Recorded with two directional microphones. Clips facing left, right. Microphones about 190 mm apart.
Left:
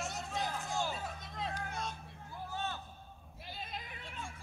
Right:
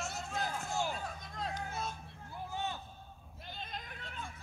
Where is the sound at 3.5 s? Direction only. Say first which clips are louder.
Even; 5° left (ahead or behind).